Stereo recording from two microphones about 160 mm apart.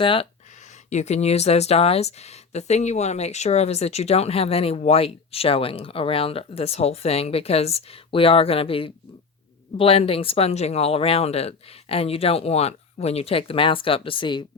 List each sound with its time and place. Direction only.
0.0 s speech: 35° left (ahead or behind)
0.9 s speech: 45° left (ahead or behind); by 14.4 s 30° left (ahead or behind)